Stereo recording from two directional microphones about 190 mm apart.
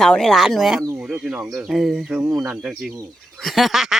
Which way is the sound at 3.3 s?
Centre (ahead or behind).